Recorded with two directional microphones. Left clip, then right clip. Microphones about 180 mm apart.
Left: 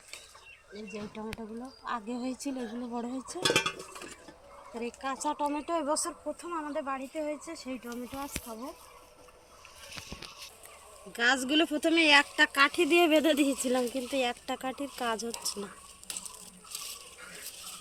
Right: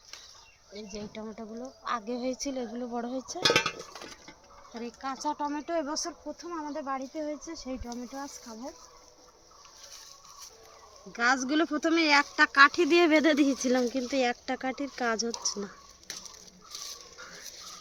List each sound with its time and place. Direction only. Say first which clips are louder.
0.8 s speech: right 1 dB; 30° right (ahead or behind)
3.4 s speech: right 3 dB; 10° right (ahead or behind)
4.7 s speech: left 1 dB; 40° right (ahead or behind)
11.1 s speech: even; 35° right (ahead or behind)
16.7 s a sound: right 1 dB; 15° right (ahead or behind)